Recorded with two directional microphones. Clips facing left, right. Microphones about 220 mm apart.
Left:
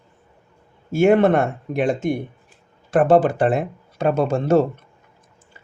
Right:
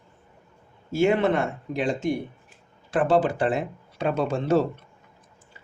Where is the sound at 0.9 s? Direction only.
55° left (ahead or behind).